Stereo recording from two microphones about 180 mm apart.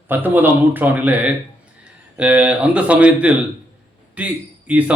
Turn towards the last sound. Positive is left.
turn(degrees=-5)  # may be behind; listen again after turning